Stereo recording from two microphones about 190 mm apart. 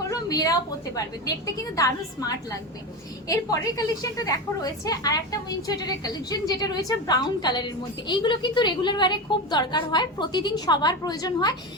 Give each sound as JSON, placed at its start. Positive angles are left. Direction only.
{"t": 0.1, "sound": "a woman's voice", "side_deg": 20}